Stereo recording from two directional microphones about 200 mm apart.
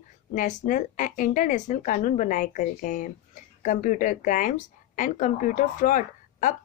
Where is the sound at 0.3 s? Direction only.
40° left (ahead or behind).